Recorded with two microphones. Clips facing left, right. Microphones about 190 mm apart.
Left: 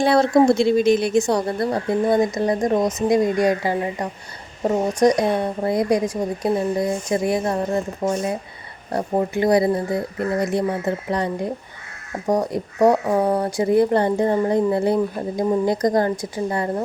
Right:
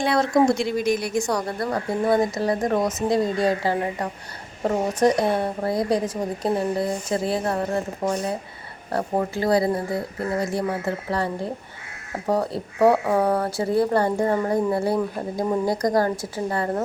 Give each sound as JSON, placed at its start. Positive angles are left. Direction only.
{"t": 0.0, "sound": "speech", "side_deg": 30}